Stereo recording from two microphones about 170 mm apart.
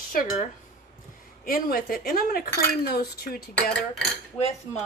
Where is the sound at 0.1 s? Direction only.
55° left (ahead or behind).